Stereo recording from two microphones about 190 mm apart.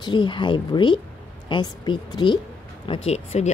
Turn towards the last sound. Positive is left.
turn(degrees=35)  # may be behind; listen again after turning